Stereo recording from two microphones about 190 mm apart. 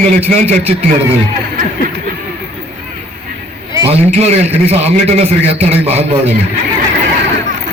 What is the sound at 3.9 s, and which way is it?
A man's voice, 35° right (ahead or behind).